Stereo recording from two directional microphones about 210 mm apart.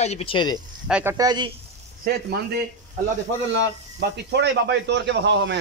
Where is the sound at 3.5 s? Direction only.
55° right (ahead or behind).